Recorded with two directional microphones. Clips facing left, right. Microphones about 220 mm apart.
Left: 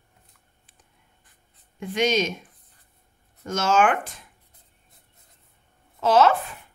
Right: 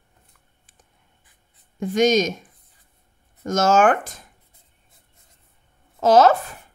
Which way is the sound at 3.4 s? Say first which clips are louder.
Right 4 dB; 45° right (ahead or behind).